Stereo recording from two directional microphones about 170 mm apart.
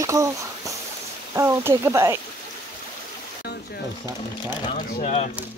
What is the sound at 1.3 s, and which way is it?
Speech, 15° right (ahead or behind).